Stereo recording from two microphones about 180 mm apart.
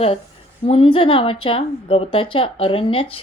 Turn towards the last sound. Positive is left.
turn(degrees=30)  # may be behind; listen again after turning